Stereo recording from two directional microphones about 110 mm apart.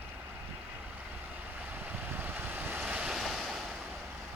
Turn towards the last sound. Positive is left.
turn(degrees=0)  # may be behind; listen again after turning